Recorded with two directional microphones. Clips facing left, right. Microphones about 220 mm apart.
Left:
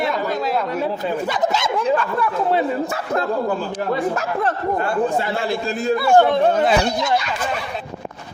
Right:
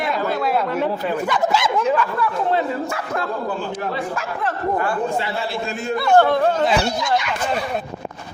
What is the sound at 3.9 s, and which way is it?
A man's voice, 40° left (ahead or behind).